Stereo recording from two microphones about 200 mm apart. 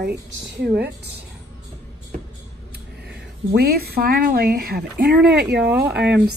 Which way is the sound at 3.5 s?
50° right (ahead or behind).